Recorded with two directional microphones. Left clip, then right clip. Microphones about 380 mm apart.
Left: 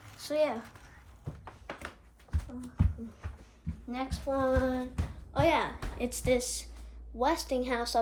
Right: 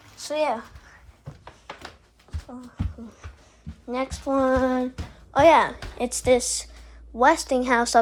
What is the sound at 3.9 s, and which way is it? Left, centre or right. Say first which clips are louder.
Speech: right 8 dB; centre.